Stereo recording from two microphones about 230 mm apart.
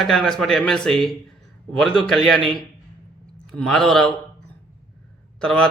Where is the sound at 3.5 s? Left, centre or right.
Centre.